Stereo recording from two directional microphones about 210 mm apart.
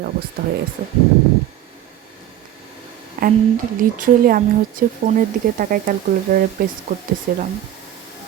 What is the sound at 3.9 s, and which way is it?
A woman's voice, 40° right (ahead or behind).